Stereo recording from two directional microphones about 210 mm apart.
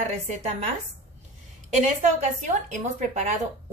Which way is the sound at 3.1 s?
35° right (ahead or behind).